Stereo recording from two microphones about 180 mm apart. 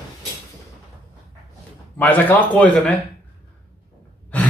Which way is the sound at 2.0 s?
10° left (ahead or behind).